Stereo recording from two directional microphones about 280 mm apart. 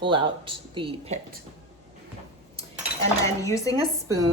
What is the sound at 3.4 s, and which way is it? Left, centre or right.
Speech, centre.